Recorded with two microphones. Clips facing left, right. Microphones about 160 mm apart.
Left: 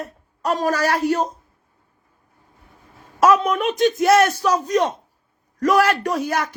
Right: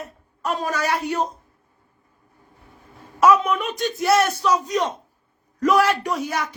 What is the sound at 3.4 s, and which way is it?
A man's voice, 40° left (ahead or behind).